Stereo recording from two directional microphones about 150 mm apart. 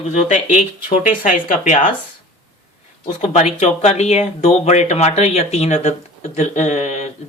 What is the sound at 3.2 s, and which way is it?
Speech, 50° left (ahead or behind).